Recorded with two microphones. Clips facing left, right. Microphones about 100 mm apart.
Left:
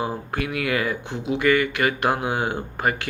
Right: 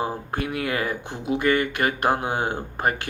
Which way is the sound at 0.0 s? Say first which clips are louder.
Even; 40° right (ahead or behind).